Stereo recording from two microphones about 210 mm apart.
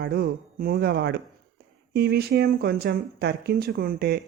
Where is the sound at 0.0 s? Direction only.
50° right (ahead or behind).